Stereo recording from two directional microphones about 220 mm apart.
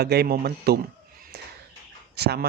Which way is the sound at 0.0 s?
45° right (ahead or behind).